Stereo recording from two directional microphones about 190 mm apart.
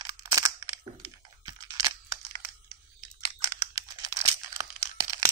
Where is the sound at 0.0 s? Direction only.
20° right (ahead or behind).